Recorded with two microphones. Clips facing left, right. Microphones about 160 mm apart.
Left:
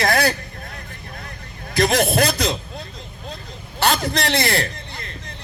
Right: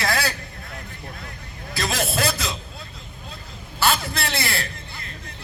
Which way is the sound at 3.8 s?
40° left (ahead or behind).